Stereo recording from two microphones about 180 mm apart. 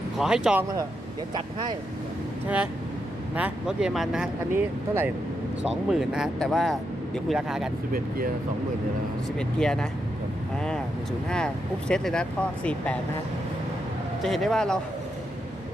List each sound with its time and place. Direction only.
0.2 s speech: 5° right (ahead or behind)
1.3 s speech: 25° right (ahead or behind)
3.3 s speech: 5° right (ahead or behind)
4.5 s speech: 10° right (ahead or behind)
9.4 s speech: 5° left (ahead or behind)
11.3 s speech: 5° left (ahead or behind)
14.2 s speech: centre (ahead or behind)